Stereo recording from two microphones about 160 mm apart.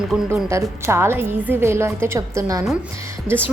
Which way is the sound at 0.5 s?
15° right (ahead or behind).